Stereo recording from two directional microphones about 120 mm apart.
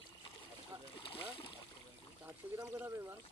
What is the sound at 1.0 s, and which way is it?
Speech, 45° left (ahead or behind).